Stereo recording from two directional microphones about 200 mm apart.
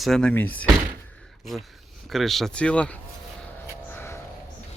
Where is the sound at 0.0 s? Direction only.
5° left (ahead or behind).